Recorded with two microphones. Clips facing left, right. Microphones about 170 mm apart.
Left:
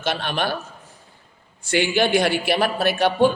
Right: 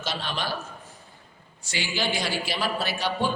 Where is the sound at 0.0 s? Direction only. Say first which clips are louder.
Left 7 dB; 60° left (ahead or behind).